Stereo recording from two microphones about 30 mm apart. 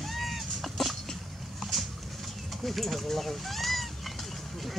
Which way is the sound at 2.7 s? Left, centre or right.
Centre.